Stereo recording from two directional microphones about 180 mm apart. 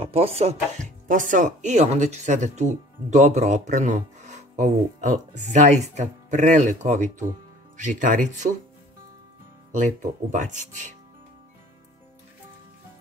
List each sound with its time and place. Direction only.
0.0 s speech: 30° right (ahead or behind)
1.0 s speech: 45° right (ahead or behind)
9.7 s speech: 45° right (ahead or behind)